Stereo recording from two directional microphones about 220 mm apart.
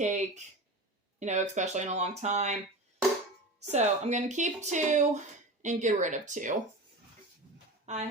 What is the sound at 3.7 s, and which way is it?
Speech, 30° right (ahead or behind).